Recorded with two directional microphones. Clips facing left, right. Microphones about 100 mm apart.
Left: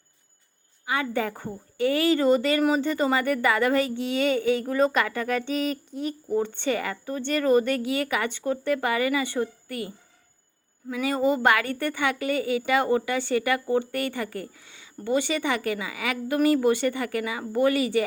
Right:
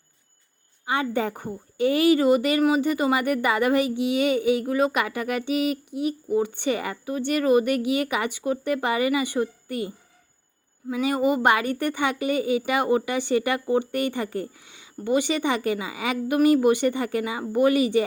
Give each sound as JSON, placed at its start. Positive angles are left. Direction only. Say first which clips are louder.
{"t": 0.9, "sound": "a woman's voice", "louder": "right 2 dB", "side_deg": -25}
{"t": 10.9, "sound": "a woman's voice", "louder": "right 1 dB", "side_deg": -20}